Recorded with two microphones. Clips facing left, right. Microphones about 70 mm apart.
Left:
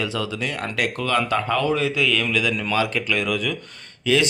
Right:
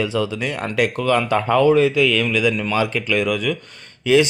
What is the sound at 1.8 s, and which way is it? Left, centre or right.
Speech, centre.